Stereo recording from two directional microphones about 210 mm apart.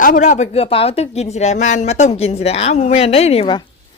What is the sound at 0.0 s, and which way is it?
A woman's voice, 40° left (ahead or behind).